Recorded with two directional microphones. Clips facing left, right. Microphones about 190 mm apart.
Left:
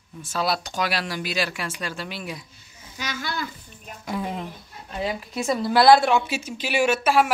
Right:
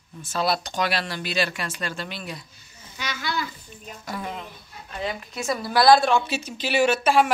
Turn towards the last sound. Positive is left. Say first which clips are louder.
# right 1 dB
turn(degrees=5)  # may be behind; listen again after turning